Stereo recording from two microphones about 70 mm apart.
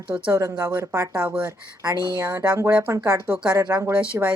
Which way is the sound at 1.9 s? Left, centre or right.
Right.